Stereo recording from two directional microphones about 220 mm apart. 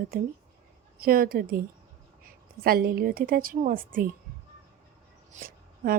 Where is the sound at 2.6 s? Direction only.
45° right (ahead or behind).